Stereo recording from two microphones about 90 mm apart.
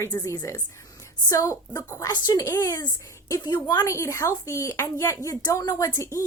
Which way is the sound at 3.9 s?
35° left (ahead or behind).